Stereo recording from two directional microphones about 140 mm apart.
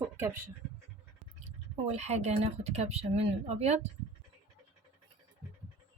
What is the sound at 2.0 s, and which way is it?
Speech, 50° right (ahead or behind).